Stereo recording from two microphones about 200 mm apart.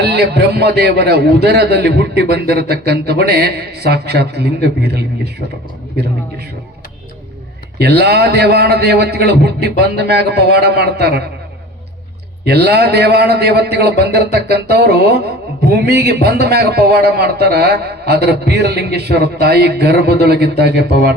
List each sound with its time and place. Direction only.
0.0 s a man's voice: 55° right (ahead or behind)
7.8 s a man's voice: 55° right (ahead or behind)
12.5 s a man's voice: 55° right (ahead or behind)